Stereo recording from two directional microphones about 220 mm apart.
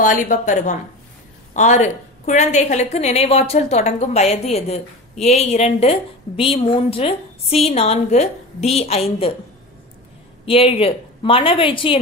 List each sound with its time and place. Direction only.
0.0 s a woman's voice: 35° left (ahead or behind)
10.4 s a woman's voice: 25° left (ahead or behind)